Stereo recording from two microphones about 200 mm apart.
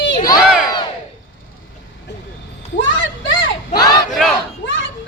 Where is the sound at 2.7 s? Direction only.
70° left (ahead or behind).